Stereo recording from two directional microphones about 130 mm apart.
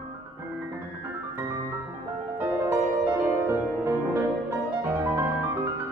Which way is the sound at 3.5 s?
20° right (ahead or behind).